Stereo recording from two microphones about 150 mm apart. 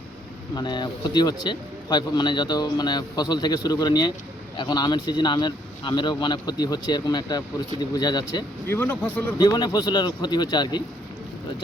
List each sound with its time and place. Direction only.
0.5 s a man's voice: 30° left (ahead or behind)
8.6 s speech: 15° left (ahead or behind)
9.4 s a man's voice: 30° left (ahead or behind)